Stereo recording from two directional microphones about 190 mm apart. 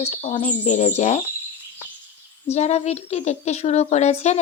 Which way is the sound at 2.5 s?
35° left (ahead or behind).